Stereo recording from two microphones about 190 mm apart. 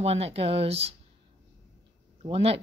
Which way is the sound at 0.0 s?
30° right (ahead or behind).